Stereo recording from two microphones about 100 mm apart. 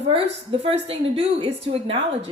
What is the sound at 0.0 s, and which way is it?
A woman's voice, 70° right (ahead or behind).